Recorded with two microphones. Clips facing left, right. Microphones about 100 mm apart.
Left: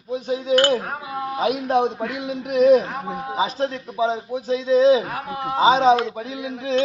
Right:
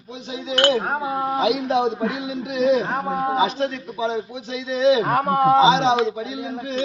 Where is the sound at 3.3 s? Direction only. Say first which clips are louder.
Right 2 dB; 35° left (ahead or behind).